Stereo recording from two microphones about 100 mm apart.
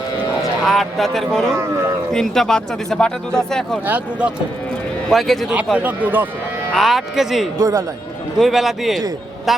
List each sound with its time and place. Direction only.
0.6 s speech: centre (ahead or behind)
3.8 s speech: 15° right (ahead or behind)
5.0 s speech: centre (ahead or behind)
5.7 s speech: 15° right (ahead or behind)
6.7 s speech: centre (ahead or behind)
7.6 s speech: 35° right (ahead or behind)
8.4 s speech: centre (ahead or behind)